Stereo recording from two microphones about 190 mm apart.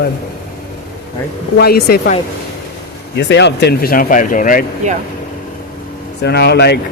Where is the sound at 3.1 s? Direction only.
65° left (ahead or behind); by 4.7 s 45° left (ahead or behind).